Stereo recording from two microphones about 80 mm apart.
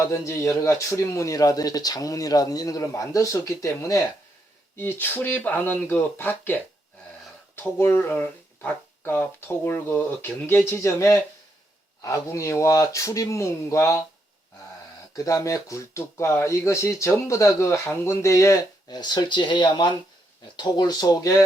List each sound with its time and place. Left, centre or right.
0.1 s speech: left
4.8 s speech: left
15.1 s speech: left
18.9 s speech: left
20.6 s speech: left